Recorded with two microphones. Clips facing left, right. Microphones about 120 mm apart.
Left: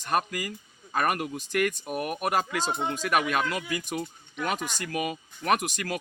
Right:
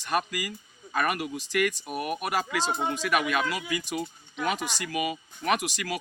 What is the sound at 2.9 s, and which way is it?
Speech, 40° left (ahead or behind).